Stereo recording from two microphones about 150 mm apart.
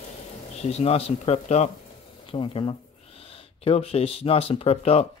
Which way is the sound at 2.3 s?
35° left (ahead or behind).